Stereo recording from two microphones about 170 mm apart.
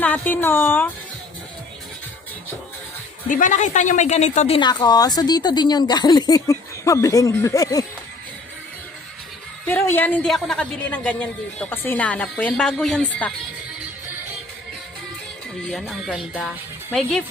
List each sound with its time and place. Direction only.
0.0 s a woman's voice: 10° left (ahead or behind)
3.2 s speech: 50° left (ahead or behind); by 7.9 s 20° left (ahead or behind)
9.6 s a woman's voice: 10° left (ahead or behind)
15.7 s speech: centre (ahead or behind)